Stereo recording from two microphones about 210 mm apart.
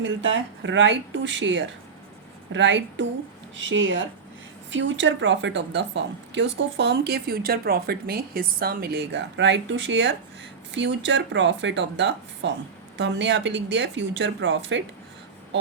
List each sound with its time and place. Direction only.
0.0 s speech: 60° right (ahead or behind)